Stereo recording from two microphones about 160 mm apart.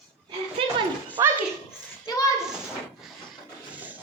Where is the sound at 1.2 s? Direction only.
20° right (ahead or behind).